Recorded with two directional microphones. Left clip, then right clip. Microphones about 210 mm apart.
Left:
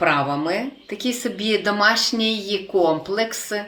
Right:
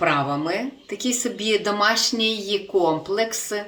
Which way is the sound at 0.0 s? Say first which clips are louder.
Left 2 dB; centre (ahead or behind).